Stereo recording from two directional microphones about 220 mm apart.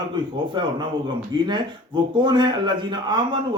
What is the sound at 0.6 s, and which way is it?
A man's voice, 20° right (ahead or behind).